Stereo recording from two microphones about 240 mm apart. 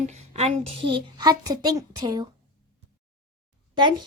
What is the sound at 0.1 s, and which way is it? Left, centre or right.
A child's voice, right.